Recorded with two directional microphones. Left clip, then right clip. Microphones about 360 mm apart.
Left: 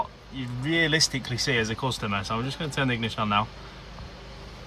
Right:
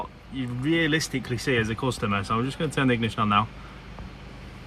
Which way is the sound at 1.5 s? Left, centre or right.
Centre.